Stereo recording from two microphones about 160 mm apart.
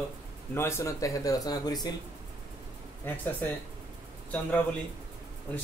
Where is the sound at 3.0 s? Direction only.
10° left (ahead or behind).